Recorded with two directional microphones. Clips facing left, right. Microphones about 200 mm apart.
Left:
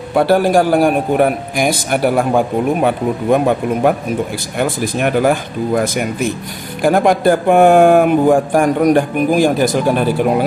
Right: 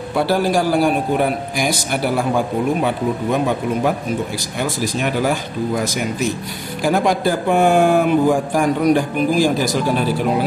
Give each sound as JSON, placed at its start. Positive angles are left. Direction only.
{"t": 0.1, "sound": "a man's voice", "side_deg": 55}